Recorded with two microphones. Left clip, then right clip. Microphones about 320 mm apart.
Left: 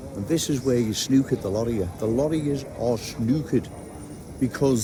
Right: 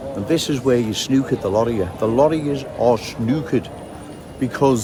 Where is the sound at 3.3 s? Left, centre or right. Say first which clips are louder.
Right 4 dB; centre.